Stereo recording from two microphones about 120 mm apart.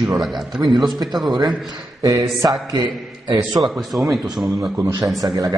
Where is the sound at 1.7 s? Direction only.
30° right (ahead or behind).